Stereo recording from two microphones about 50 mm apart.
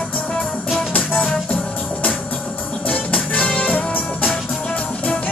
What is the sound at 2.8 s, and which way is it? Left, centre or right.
Music, left.